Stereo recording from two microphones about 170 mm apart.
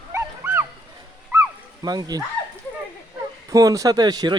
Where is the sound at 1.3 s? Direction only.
20° right (ahead or behind).